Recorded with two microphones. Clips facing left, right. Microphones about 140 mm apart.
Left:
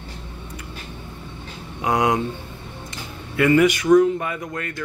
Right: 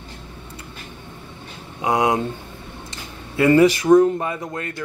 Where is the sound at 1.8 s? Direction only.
20° right (ahead or behind).